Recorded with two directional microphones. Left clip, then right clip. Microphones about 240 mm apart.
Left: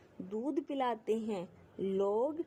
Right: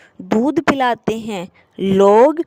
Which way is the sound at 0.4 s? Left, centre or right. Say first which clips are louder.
Right 18 dB; right.